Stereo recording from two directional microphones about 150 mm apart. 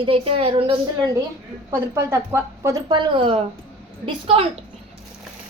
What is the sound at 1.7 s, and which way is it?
A woman's voice, 20° right (ahead or behind).